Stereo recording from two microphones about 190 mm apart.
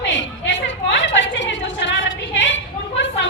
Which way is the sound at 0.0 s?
75° left (ahead or behind).